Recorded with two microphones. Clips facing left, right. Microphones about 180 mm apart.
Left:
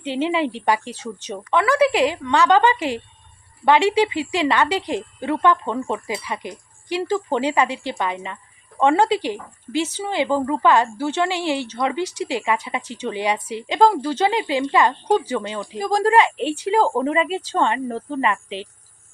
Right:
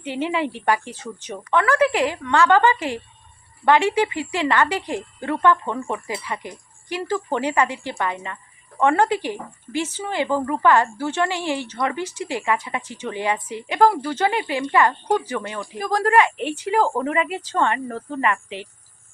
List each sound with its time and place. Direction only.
0.0 s a woman's voice: 20° left (ahead or behind)